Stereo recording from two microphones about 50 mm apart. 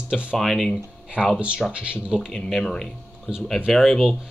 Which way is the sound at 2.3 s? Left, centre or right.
Centre.